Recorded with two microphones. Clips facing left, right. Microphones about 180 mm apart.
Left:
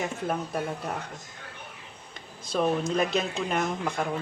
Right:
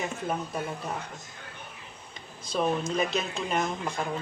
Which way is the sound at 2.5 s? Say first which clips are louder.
Left 2 dB; 55° left (ahead or behind).